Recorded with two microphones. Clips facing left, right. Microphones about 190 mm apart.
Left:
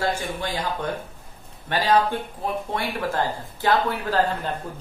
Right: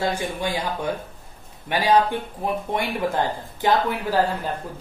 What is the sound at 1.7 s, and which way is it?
Speech, 15° right (ahead or behind).